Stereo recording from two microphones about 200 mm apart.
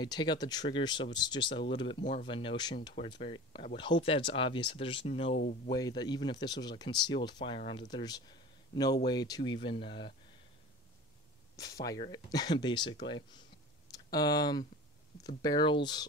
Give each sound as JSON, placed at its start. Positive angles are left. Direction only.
{"t": 0.0, "sound": "speech", "side_deg": 20}
{"t": 11.5, "sound": "speech", "side_deg": 15}